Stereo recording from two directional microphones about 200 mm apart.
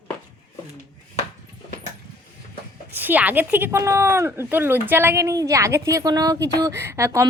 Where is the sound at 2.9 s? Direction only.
10° right (ahead or behind).